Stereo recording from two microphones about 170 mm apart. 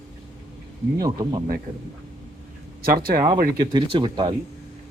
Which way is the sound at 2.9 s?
60° right (ahead or behind).